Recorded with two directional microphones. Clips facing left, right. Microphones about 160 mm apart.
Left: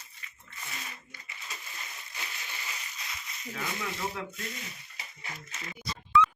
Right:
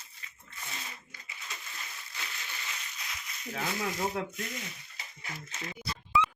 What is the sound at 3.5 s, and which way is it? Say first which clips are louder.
Speech: right 3 dB; 50° right (ahead or behind).